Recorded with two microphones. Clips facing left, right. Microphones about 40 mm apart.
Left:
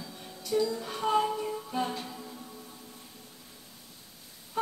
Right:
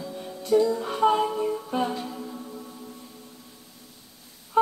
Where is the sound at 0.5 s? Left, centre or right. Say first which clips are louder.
Right 8 dB; right.